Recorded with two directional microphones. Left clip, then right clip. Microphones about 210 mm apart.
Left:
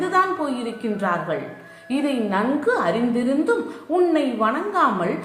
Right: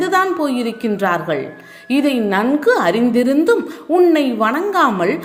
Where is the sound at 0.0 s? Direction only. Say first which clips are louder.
Right 4 dB; 40° right (ahead or behind).